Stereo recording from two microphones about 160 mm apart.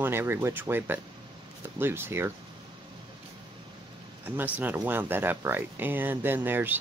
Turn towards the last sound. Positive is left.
turn(degrees=-10)  # may be behind; listen again after turning